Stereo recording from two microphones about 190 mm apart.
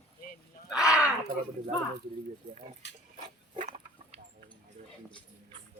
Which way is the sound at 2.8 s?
65° left (ahead or behind).